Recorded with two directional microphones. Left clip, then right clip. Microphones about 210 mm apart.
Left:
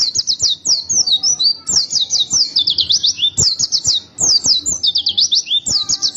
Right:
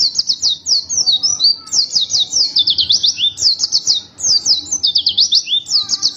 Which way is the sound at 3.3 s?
15° left (ahead or behind).